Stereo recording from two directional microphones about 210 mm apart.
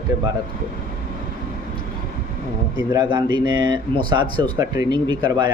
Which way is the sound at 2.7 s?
20° right (ahead or behind).